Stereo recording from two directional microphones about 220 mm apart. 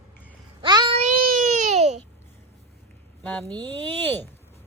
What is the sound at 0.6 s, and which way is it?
Child singing, 20° right (ahead or behind).